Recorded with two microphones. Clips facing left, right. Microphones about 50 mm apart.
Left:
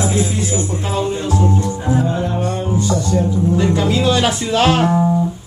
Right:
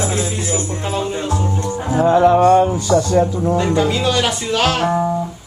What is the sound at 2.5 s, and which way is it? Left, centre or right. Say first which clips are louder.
Music: right 8 dB; right.